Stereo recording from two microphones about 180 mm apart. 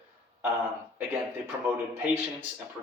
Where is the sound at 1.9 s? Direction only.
15° right (ahead or behind).